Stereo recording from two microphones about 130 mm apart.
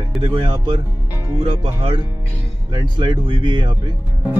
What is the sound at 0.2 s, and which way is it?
Speech, 40° right (ahead or behind).